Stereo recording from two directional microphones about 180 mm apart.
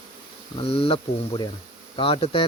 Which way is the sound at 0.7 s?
30° left (ahead or behind).